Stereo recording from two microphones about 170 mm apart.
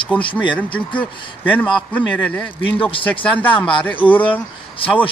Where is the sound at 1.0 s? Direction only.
10° left (ahead or behind).